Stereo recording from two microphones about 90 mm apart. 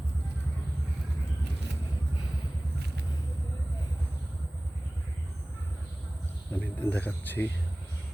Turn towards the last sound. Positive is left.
turn(degrees=20)  # may be behind; listen again after turning